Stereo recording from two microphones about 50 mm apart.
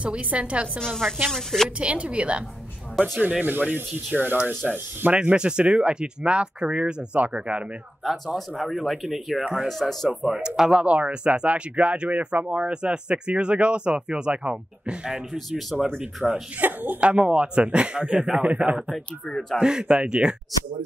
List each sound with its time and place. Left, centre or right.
0.0 s speech: right
0.7 s speech: centre
1.8 s speech: right
3.2 s speech: right
5.3 s speech: centre
8.0 s speech: centre
10.0 s speech: centre
10.8 s speech: right
15.3 s speech: centre
16.5 s speech: right
17.0 s speech: right
19.6 s speech: centre